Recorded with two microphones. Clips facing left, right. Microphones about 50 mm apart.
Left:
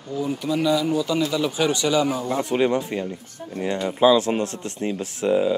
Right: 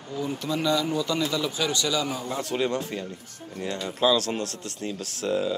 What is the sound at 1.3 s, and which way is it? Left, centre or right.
Speech, left.